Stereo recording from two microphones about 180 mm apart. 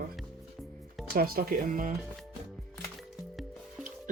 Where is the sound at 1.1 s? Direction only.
55° right (ahead or behind).